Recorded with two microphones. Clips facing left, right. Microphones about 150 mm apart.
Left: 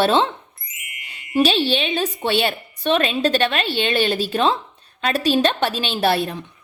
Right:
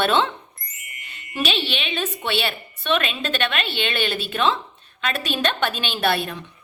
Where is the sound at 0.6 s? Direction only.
Centre (ahead or behind).